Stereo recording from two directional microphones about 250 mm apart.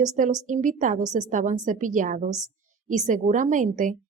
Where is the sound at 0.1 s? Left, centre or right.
Right.